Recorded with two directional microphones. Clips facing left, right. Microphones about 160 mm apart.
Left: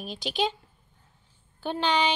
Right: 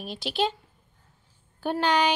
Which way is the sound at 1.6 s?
10° right (ahead or behind).